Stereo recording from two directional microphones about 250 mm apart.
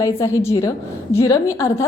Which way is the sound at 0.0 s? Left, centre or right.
Centre.